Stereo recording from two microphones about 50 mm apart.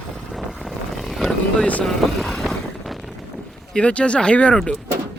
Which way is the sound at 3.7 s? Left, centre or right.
Left.